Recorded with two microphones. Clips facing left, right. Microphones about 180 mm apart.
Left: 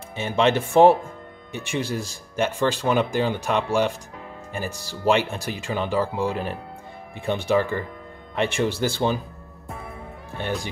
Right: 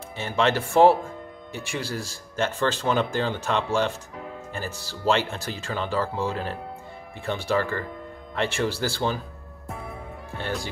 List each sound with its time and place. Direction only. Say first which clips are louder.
0.1 s speech: left 3 dB; 20° left (ahead or behind)
10.4 s speech: left 3 dB; 20° left (ahead or behind)